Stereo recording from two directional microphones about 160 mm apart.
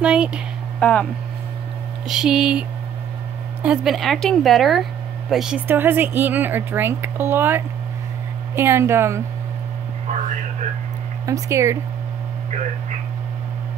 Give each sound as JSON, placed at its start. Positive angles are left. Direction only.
{"t": 0.0, "sound": "a woman's voice", "side_deg": -5}
{"t": 0.7, "sound": "speech", "side_deg": 10}
{"t": 2.0, "sound": "a woman's voice", "side_deg": -5}
{"t": 3.6, "sound": "a woman's voice", "side_deg": -5}
{"t": 11.2, "sound": "speech", "side_deg": -20}